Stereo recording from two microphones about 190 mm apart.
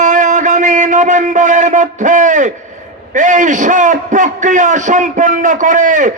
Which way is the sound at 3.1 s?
40° right (ahead or behind).